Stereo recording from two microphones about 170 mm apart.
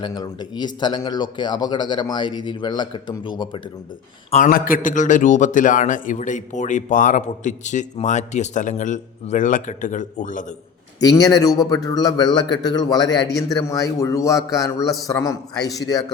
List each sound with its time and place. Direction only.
0.0 s speech: 25° left (ahead or behind)
4.3 s a man's voice: 45° left (ahead or behind)
11.0 s speech: 20° left (ahead or behind)